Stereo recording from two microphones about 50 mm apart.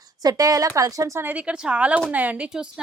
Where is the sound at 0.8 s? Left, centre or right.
Right.